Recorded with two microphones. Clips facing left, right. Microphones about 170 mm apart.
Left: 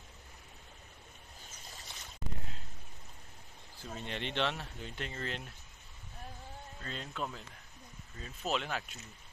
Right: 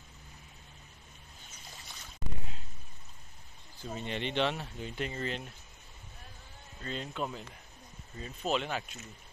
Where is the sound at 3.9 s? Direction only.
5° right (ahead or behind).